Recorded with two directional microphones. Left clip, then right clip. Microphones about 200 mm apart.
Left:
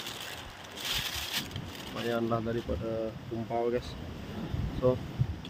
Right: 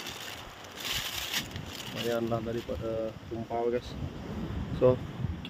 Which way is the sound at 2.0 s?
Centre (ahead or behind).